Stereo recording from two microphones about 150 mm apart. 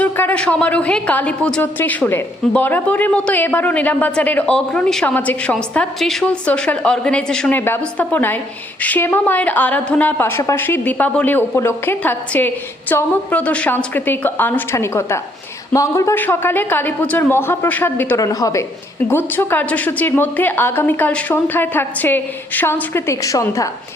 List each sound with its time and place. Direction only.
0.0 s a woman's voice: 10° left (ahead or behind)